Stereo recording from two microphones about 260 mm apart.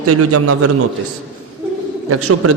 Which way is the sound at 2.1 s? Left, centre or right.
Right.